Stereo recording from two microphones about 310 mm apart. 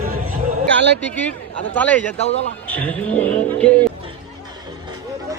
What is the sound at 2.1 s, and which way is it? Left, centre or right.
Speech, left.